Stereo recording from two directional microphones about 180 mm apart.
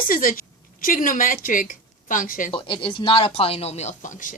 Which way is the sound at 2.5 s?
30° left (ahead or behind).